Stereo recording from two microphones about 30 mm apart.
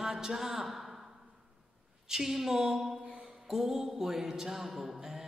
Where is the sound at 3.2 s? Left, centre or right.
Centre.